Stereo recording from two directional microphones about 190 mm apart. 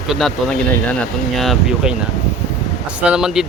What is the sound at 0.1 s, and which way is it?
Speech, centre (ahead or behind).